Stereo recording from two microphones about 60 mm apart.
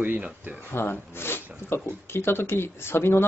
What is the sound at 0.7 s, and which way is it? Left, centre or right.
Speech, left.